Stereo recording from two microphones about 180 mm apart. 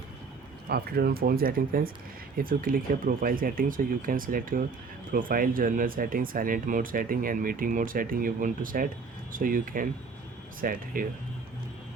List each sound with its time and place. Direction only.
0.7 s speech: 60° right (ahead or behind)